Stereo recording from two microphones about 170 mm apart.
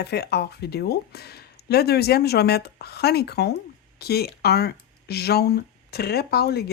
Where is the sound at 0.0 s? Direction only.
70° left (ahead or behind).